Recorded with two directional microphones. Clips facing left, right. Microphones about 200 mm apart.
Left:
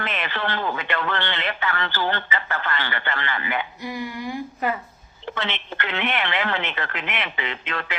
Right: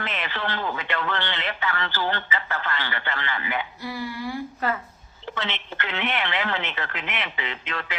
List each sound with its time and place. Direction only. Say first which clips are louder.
0.0 s speech: left 2 dB; 60° left (ahead or behind)
3.8 s a woman's voice: left 1 dB; 15° left (ahead or behind)
5.2 s speech: left 2 dB; 60° left (ahead or behind)